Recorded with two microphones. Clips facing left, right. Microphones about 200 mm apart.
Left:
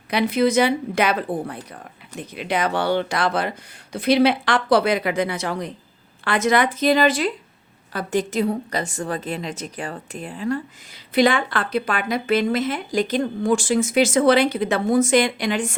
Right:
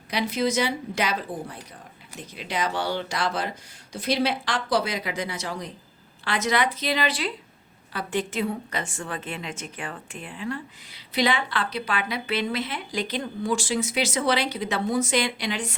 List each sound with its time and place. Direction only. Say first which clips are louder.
0.1 s a woman's voice: left 6 dB; 60° left (ahead or behind)